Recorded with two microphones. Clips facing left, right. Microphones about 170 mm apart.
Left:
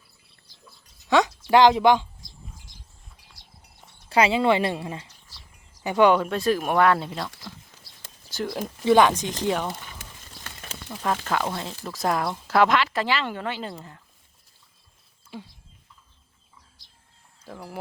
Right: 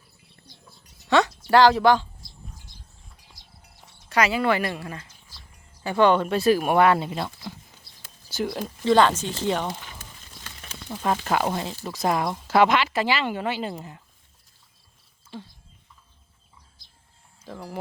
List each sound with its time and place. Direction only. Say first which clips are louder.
1.1 s speech: even; 15° left (ahead or behind)
4.1 s speech: left 2 dB; 25° left (ahead or behind)
5.8 s speech: left 1 dB; 15° left (ahead or behind); by 7.1 s 5° right (ahead or behind)
8.3 s speech: right 1 dB; 5° right (ahead or behind)
8.8 s speech: left 1 dB; 15° left (ahead or behind)
10.8 s speech: right 2 dB; 15° right (ahead or behind)
11.6 s speech: right 1 dB; 5° right (ahead or behind)
15.3 s speech: even; 10° left (ahead or behind)
17.4 s speech: right 2 dB; 5° left (ahead or behind)